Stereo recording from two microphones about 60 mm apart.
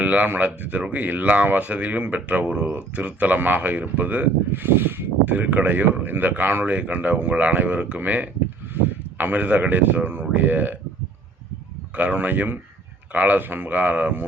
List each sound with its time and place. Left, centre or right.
0.0 s speech: right
11.9 s speech: right